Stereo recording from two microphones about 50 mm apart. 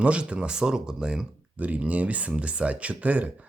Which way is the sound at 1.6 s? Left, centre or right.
Right.